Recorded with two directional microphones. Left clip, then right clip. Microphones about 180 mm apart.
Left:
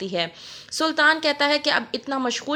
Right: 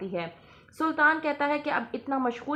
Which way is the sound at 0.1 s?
25° left (ahead or behind).